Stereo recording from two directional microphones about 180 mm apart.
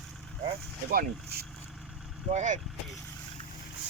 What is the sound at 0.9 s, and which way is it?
Speech, 55° right (ahead or behind).